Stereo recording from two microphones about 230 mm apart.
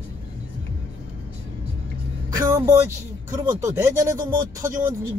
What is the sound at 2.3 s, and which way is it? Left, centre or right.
A man's voice, centre.